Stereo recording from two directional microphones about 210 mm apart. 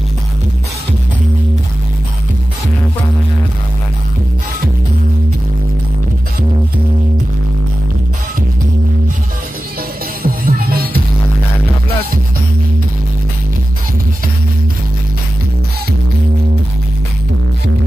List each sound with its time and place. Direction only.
10.2 s music: 45° right (ahead or behind)